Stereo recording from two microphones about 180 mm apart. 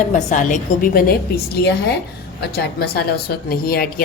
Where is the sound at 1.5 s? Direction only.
70° left (ahead or behind).